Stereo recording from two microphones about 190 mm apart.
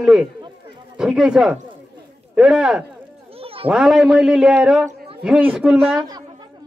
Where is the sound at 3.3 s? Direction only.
30° right (ahead or behind).